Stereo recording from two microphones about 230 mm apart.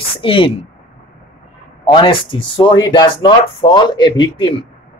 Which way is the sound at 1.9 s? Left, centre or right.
Left.